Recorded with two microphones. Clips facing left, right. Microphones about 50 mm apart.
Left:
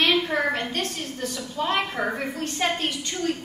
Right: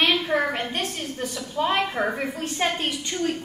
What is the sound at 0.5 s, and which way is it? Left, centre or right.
A woman's voice, centre.